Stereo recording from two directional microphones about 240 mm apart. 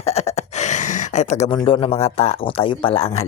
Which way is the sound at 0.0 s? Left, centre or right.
Left.